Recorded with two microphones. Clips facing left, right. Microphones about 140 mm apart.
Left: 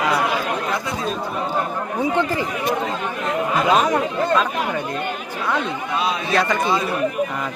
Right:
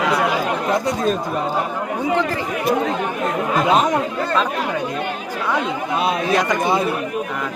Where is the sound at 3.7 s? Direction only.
20° right (ahead or behind).